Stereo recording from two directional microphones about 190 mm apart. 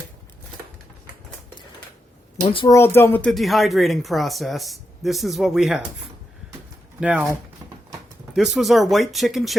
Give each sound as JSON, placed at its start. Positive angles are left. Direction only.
{"t": 2.4, "sound": "speech", "side_deg": 30}
{"t": 2.7, "sound": "speech", "side_deg": 10}
{"t": 7.0, "sound": "speech", "side_deg": -5}
{"t": 8.3, "sound": "speech", "side_deg": 0}